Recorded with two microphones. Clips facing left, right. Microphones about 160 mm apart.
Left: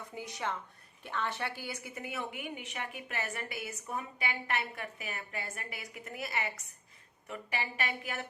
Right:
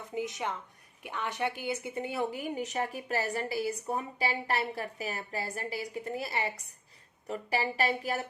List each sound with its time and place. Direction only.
0.1 s a woman's voice: 20° right (ahead or behind); by 8.3 s 35° right (ahead or behind)